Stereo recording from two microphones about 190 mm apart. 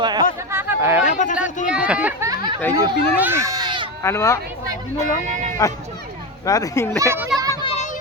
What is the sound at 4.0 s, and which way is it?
Speech, 15° left (ahead or behind).